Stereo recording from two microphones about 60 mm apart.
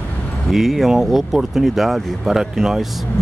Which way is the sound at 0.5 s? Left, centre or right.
Centre.